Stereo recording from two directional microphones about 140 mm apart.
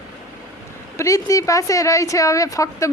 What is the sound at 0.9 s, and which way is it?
Speech, 25° left (ahead or behind).